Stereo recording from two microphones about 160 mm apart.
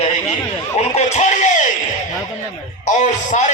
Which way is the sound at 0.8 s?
45° left (ahead or behind).